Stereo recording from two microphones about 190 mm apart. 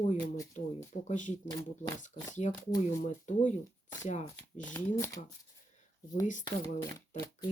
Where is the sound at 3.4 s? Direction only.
40° left (ahead or behind).